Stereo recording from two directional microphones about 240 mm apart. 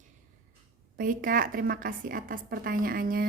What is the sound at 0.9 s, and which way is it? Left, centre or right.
A woman's voice, right.